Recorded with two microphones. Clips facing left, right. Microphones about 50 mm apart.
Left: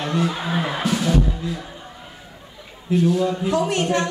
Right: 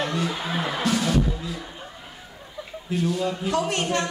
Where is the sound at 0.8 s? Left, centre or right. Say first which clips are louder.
Even; centre.